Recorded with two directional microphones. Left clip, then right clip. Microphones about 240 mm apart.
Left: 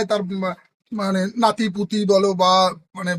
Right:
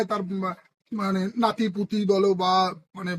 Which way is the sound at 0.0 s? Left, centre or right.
Left.